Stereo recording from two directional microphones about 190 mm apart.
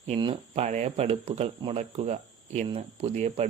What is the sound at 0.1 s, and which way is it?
Speech, 30° right (ahead or behind).